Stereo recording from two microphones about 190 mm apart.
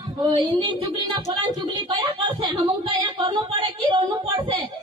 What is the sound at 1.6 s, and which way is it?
A woman's voice, 25° right (ahead or behind).